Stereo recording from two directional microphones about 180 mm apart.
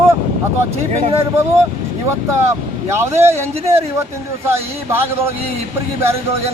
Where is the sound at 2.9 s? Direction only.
15° right (ahead or behind).